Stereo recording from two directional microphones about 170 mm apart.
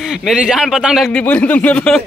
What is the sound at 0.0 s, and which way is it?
Speech, 5° right (ahead or behind).